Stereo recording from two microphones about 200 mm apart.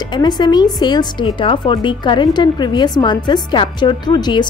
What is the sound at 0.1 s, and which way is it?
A woman's voice, 20° left (ahead or behind).